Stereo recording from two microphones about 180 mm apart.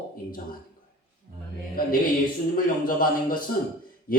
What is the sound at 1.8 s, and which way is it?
A man's voice, 50° left (ahead or behind).